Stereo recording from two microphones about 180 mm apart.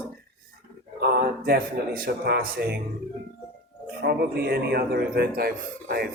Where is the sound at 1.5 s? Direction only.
60° right (ahead or behind).